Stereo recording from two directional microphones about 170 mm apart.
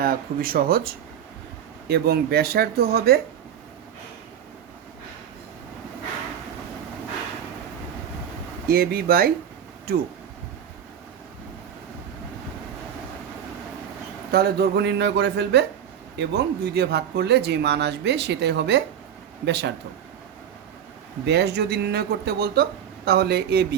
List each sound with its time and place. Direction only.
0.0 s speech: 60° right (ahead or behind)
1.9 s speech: 70° right (ahead or behind)
8.6 s speech: 60° right (ahead or behind)
14.3 s speech: 70° right (ahead or behind); by 15.6 s 90° right
16.1 s speech: 75° right (ahead or behind)
21.2 s speech: 80° right